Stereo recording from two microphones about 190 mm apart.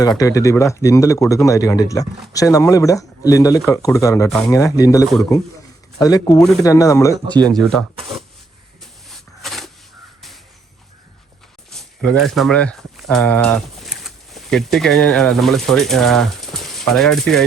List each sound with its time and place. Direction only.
0.2 s speech: 15° left (ahead or behind)
4.3 s speech: centre (ahead or behind)
4.5 s speech: 15° left (ahead or behind)
7.3 s speech: 20° right (ahead or behind)
7.6 s speech: 5° left (ahead or behind)
7.9 s a sound: 30° right (ahead or behind)
9.0 s a sound: centre (ahead or behind)
11.7 s speech: centre (ahead or behind)